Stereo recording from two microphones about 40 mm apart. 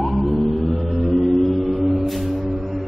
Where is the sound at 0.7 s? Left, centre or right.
Left.